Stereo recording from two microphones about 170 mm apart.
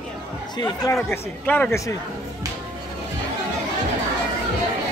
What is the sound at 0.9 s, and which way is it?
Speech, 5° left (ahead or behind).